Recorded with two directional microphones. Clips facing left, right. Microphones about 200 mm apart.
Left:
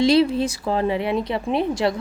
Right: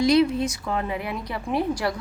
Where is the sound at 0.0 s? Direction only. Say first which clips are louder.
Left 2 dB; 30° left (ahead or behind).